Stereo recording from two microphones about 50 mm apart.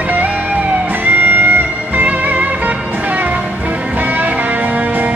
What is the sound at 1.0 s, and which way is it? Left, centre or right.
Music, right.